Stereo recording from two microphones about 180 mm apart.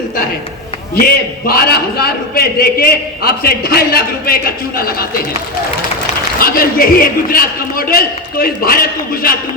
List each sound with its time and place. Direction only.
1.5 s a man's voice: 60° left (ahead or behind)
6.4 s a man's voice: 55° left (ahead or behind)